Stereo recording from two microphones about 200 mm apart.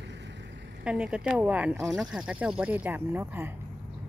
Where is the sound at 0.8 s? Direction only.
5° right (ahead or behind).